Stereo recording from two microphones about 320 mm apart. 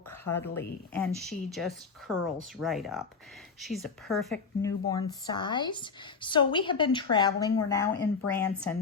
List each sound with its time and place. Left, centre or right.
0.3 s speech: centre
4.9 s a woman's voice: centre